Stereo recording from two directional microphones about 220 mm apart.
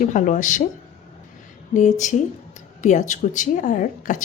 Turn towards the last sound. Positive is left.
turn(degrees=35)  # may be behind; listen again after turning